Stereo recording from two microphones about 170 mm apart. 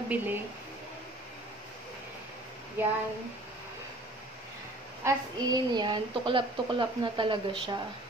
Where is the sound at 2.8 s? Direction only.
10° right (ahead or behind).